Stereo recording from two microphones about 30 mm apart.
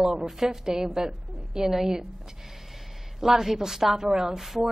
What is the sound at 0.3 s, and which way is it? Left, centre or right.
A woman's voice, centre.